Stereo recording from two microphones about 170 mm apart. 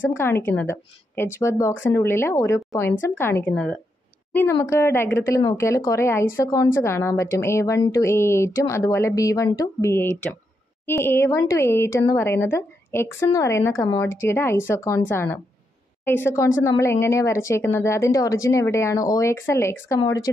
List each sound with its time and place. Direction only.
0.1 s a woman's voice: 15° left (ahead or behind)